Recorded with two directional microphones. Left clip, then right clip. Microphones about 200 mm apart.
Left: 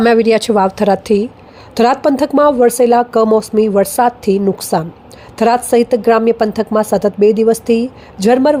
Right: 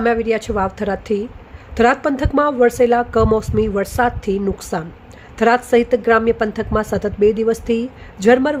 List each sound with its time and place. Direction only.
0.0 s a woman's voice: 25° left (ahead or behind); by 8.5 s 10° left (ahead or behind)